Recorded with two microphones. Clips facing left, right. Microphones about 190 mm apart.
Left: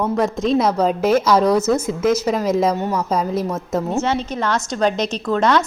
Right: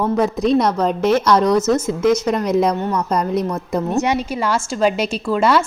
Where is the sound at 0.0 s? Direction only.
Centre (ahead or behind).